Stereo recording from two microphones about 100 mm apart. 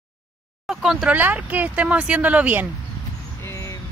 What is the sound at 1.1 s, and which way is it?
Speech, 15° right (ahead or behind).